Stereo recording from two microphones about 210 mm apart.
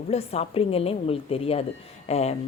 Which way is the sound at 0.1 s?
30° left (ahead or behind).